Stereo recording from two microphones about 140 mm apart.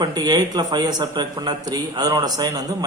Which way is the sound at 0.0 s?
30° right (ahead or behind).